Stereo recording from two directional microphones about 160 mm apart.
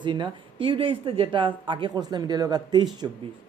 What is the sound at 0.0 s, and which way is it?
A woman's voice, 30° right (ahead or behind).